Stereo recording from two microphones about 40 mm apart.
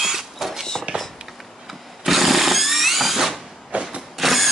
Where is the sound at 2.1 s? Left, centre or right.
Centre.